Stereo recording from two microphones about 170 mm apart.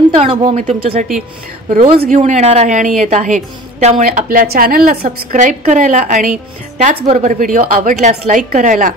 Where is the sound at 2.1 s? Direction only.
45° right (ahead or behind).